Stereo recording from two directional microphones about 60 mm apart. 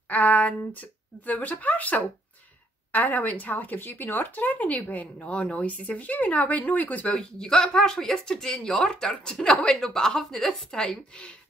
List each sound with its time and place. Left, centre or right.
0.1 s speech: left
7.2 s speech: centre